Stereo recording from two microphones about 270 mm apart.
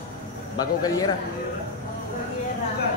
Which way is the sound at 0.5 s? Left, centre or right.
Centre.